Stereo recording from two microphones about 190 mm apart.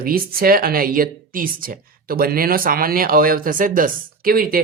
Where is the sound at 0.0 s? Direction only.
50° right (ahead or behind).